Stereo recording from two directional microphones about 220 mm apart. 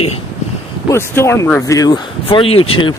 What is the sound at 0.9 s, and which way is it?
Speech, 10° left (ahead or behind).